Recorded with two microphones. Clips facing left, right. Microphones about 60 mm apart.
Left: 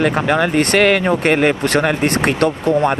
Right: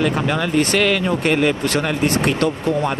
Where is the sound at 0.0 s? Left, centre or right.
Left.